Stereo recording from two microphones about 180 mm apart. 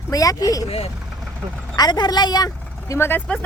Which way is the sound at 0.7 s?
35° left (ahead or behind).